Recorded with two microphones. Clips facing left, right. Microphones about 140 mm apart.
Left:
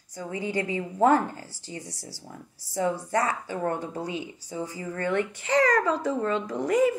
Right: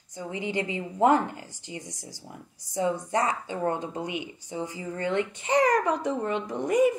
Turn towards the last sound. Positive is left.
turn(degrees=-20)  # may be behind; listen again after turning